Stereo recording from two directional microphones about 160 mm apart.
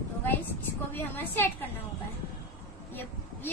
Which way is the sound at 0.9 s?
10° left (ahead or behind).